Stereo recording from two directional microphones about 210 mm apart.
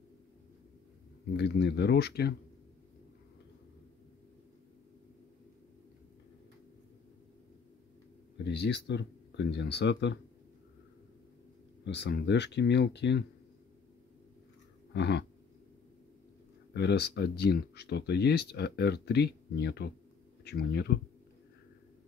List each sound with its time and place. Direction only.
1.3 s speech: 55° left (ahead or behind)
8.5 s speech: 55° left (ahead or behind)
11.8 s speech: 55° left (ahead or behind)
15.0 s speech: 55° left (ahead or behind)
16.7 s speech: 50° left (ahead or behind)